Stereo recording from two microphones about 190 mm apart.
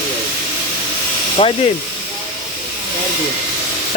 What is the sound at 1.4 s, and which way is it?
Speech, 30° left (ahead or behind).